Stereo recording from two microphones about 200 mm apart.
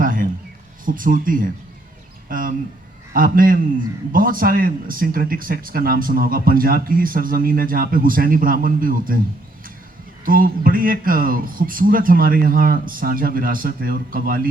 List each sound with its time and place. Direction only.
0.0 s a sound: 45° right (ahead or behind)
0.9 s speech: 45° right (ahead or behind)
10.2 s speech: 45° right (ahead or behind)